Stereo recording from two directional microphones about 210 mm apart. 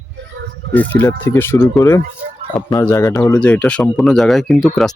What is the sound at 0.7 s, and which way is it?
Speech, 10° left (ahead or behind).